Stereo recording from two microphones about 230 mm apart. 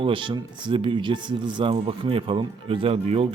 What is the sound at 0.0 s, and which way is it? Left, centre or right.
Speech, right.